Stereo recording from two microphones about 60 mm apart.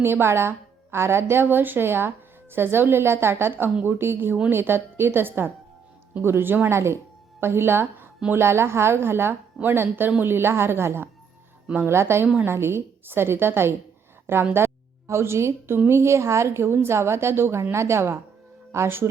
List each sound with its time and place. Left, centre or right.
0.0 s a woman's voice: right
6.7 s a woman's voice: right